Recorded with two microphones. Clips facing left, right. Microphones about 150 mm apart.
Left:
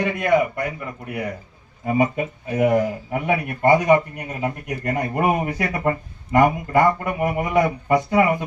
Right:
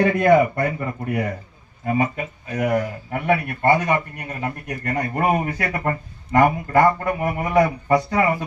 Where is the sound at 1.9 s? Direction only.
20° left (ahead or behind).